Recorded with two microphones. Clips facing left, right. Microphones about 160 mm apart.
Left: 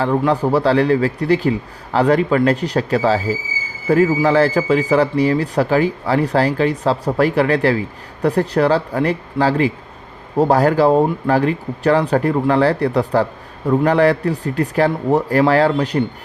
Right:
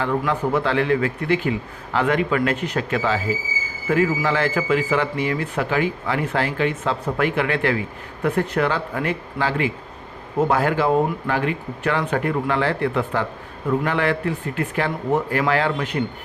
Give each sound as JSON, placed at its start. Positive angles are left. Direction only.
{"t": 0.0, "sound": "a man's voice", "side_deg": 35}